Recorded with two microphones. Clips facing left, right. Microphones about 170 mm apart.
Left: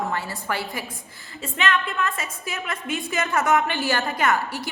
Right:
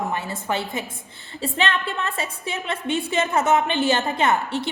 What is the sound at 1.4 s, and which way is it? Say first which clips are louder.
A woman's voice: right 1 dB; 35° right (ahead or behind).